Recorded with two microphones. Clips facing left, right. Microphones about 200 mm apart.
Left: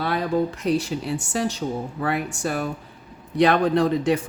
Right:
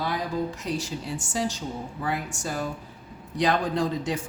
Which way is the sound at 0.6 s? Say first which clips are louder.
Left 8 dB; 60° left (ahead or behind).